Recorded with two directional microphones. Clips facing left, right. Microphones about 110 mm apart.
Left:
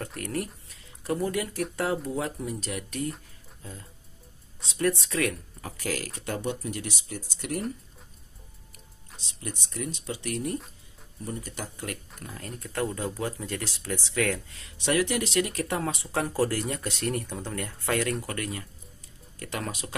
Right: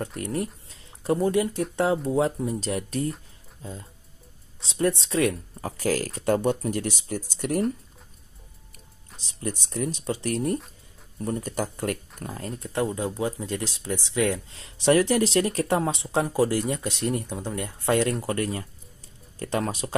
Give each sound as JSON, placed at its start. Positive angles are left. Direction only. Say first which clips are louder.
{"t": 0.2, "sound": "speech", "louder": "right 2 dB", "side_deg": -20}
{"t": 5.7, "sound": "speech", "louder": "right 7 dB", "side_deg": -40}
{"t": 9.4, "sound": "speech", "louder": "right 6 dB", "side_deg": -35}
{"t": 12.2, "sound": "speech", "louder": "right 5 dB", "side_deg": -35}